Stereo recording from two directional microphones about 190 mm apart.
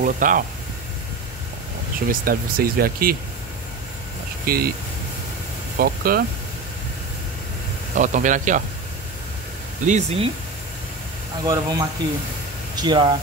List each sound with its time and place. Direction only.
0.0 s speech: 45° right (ahead or behind)
2.0 s speech: 50° right (ahead or behind)
4.5 s speech: 50° right (ahead or behind)
5.8 s speech: 50° right (ahead or behind)
7.9 s speech: 40° right (ahead or behind)
9.8 s speech: 35° right (ahead or behind)
11.4 s speech: 20° right (ahead or behind)